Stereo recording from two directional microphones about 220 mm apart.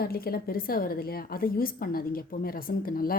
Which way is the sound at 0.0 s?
45° left (ahead or behind).